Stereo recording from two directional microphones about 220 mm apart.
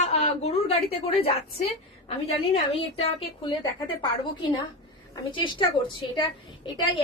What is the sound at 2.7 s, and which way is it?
A woman's voice, 25° left (ahead or behind).